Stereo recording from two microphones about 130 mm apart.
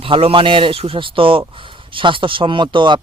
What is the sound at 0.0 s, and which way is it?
A man's voice, 45° right (ahead or behind).